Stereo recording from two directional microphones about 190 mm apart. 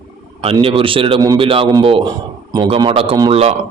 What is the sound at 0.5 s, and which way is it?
A man's voice, 30° right (ahead or behind).